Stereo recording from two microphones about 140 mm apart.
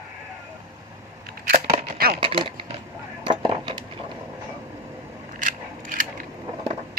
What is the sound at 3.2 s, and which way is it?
Dishes, 35° right (ahead or behind).